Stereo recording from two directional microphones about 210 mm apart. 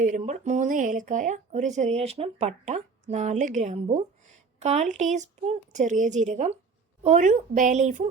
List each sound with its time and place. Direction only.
0.2 s speech: 35° right (ahead or behind)